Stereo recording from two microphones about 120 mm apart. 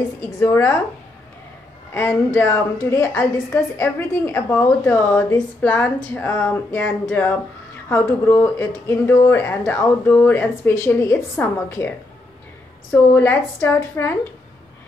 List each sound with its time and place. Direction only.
0.4 s speech: 25° left (ahead or behind)
2.0 s speech: 20° left (ahead or behind)
12.9 s speech: 15° left (ahead or behind)